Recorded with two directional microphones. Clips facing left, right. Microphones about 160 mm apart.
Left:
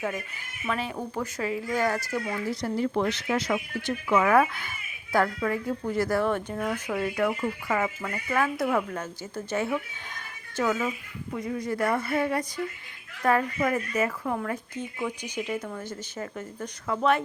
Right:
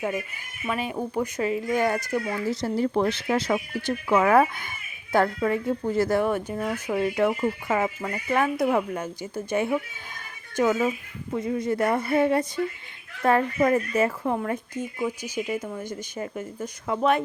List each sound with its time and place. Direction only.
0.6 s speech: 10° right (ahead or behind)
2.6 s speech: 30° right (ahead or behind)
6.2 s speech: 10° right (ahead or behind)
6.9 s speech: 20° right (ahead or behind)
14.9 s speech: 10° right (ahead or behind)